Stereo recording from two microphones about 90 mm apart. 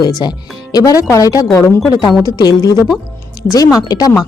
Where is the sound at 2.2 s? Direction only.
45° left (ahead or behind).